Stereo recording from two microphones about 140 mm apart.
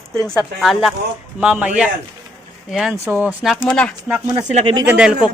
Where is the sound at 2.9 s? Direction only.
15° right (ahead or behind).